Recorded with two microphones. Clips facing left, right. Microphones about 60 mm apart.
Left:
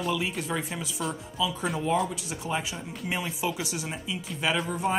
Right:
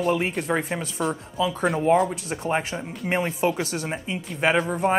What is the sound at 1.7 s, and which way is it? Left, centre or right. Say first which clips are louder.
A man's voice: right 7 dB; right.